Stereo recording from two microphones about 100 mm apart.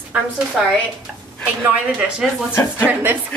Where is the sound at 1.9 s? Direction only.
10° right (ahead or behind).